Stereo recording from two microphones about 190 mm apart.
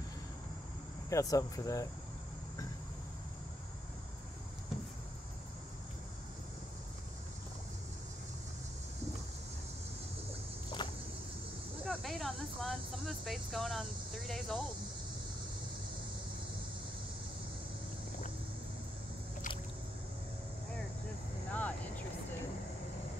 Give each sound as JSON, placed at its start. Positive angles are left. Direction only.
{"t": 1.1, "sound": "speech", "side_deg": 15}
{"t": 10.8, "sound": "vehicle", "side_deg": 25}
{"t": 11.8, "sound": "a sound", "side_deg": 0}
{"t": 21.5, "sound": "vehicle", "side_deg": 5}